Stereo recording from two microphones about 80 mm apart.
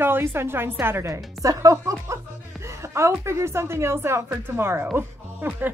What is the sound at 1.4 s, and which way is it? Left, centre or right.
Speech, right.